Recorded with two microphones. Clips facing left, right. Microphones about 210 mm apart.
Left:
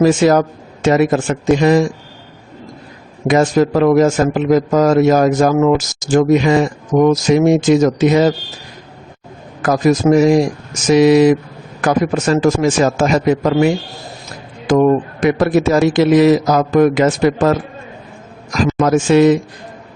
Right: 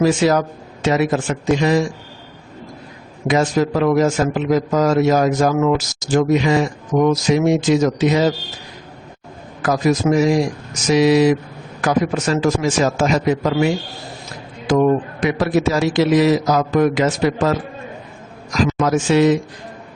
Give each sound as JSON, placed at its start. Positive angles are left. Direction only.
{"t": 0.0, "sound": "a man's voice", "side_deg": 50}
{"t": 3.2, "sound": "a man's voice", "side_deg": 50}
{"t": 9.6, "sound": "a man's voice", "side_deg": 50}
{"t": 14.7, "sound": "a man's voice", "side_deg": 50}